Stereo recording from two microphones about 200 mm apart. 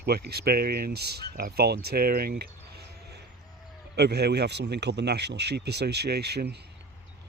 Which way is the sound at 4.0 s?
55° right (ahead or behind).